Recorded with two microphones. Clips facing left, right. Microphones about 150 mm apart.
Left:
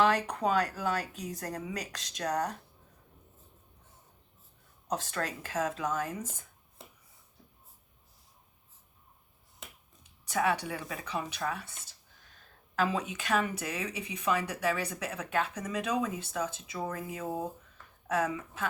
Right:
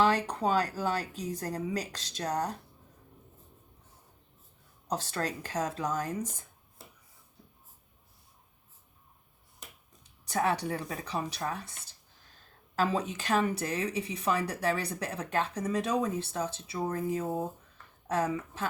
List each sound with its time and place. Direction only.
0.0 s speech: 30° right (ahead or behind)
4.9 s speech: 35° right (ahead or behind)
10.0 s speech: 35° right (ahead or behind)
12.7 s speech: 35° right (ahead or behind)